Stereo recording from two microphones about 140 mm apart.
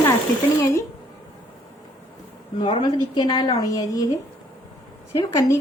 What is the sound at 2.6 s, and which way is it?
A woman's voice, 35° left (ahead or behind).